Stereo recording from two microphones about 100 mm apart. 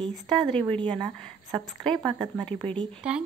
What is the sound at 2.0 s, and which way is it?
Speech, 45° right (ahead or behind).